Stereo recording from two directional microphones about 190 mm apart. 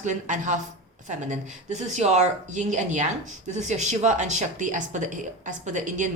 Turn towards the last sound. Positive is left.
turn(degrees=-40)  # may be behind; listen again after turning